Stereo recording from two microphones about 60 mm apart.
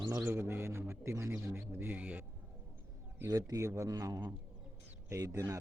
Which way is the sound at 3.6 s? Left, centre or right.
Right.